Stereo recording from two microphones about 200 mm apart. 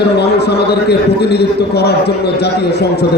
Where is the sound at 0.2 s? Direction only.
55° left (ahead or behind).